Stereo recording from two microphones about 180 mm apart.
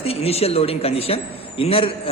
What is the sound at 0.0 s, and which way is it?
A man's voice, 35° left (ahead or behind).